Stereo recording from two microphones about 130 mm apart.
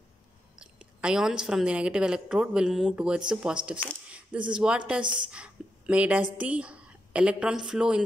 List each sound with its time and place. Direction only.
0.6 s a woman's voice: 5° right (ahead or behind)